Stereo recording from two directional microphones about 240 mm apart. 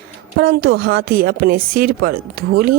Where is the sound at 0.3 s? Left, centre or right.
Right.